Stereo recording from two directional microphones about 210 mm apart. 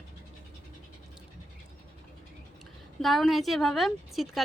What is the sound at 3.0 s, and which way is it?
A woman's voice, centre (ahead or behind).